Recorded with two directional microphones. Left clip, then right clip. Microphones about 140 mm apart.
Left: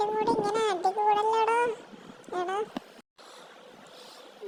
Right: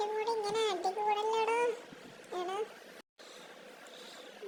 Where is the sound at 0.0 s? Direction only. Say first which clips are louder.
Left 7 dB; 30° left (ahead or behind).